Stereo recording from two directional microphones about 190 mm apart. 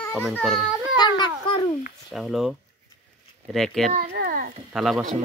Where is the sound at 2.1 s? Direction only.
Centre (ahead or behind).